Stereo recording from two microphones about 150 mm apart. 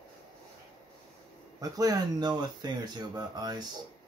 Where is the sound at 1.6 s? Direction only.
25° right (ahead or behind).